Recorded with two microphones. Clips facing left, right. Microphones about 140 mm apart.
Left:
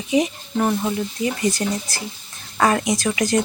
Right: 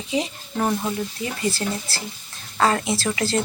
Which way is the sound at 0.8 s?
15° left (ahead or behind).